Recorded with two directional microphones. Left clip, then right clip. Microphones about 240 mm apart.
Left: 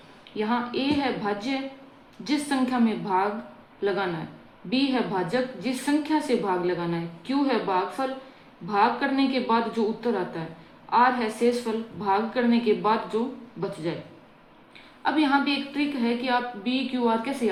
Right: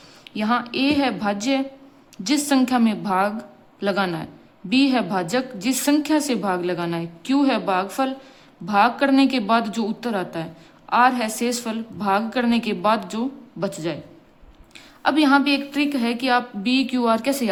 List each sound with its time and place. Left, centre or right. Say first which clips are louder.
0.3 s a woman's voice: right 4 dB; right
15.0 s a woman's voice: right 5 dB; right